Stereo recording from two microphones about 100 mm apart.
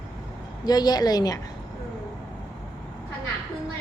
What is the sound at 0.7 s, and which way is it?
Speech, 45° left (ahead or behind).